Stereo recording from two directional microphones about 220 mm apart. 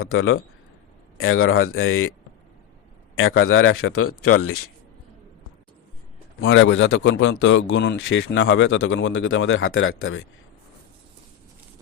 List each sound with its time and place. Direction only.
0.0 s a man's voice: 70° left (ahead or behind)
3.2 s speech: 65° left (ahead or behind); by 4.6 s 85° left
6.4 s a man's voice: 60° left (ahead or behind)